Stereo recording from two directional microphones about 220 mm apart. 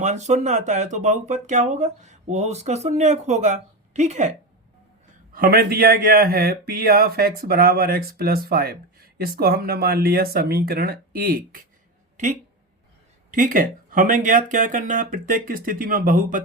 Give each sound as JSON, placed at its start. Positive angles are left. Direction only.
{"t": 0.0, "sound": "speech", "side_deg": -30}
{"t": 5.3, "sound": "speech", "side_deg": -40}